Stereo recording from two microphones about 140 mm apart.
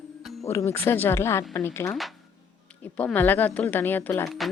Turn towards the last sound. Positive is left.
turn(degrees=15)  # may be behind; listen again after turning